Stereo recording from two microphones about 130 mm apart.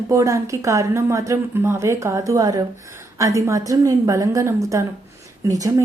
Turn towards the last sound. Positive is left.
turn(degrees=-25)  # may be behind; listen again after turning